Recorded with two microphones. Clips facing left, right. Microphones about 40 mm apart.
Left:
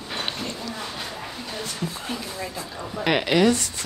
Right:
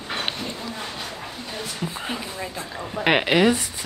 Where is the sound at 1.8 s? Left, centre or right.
Right.